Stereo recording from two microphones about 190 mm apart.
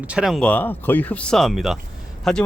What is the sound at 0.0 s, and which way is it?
Speech, 5° right (ahead or behind).